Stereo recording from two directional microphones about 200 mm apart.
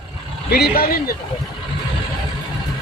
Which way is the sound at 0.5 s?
50° left (ahead or behind).